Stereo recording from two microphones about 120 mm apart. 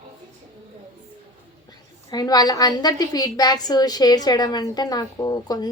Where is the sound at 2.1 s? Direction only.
35° left (ahead or behind).